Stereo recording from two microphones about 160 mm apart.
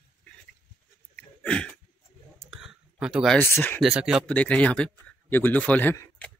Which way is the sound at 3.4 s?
10° left (ahead or behind).